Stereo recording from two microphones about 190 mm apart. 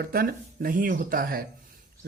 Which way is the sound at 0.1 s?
50° right (ahead or behind).